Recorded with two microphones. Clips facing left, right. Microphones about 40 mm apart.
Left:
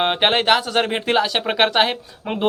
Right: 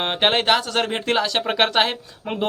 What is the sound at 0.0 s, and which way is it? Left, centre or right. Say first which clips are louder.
Speech: left 2 dB; centre.